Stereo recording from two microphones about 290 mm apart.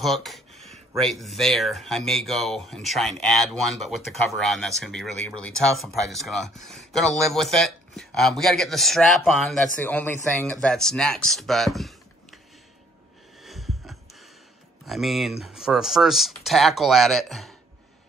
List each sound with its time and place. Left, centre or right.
0.0 s speech: centre
13.4 s a sound: centre
14.9 s speech: centre